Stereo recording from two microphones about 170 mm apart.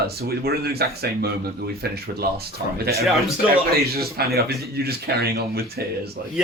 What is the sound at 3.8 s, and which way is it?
Speech, 65° right (ahead or behind).